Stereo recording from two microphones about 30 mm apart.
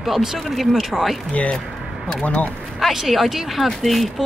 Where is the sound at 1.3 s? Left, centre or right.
Left.